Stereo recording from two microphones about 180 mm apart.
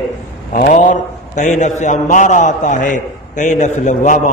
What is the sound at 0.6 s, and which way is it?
A man's voice, 45° left (ahead or behind).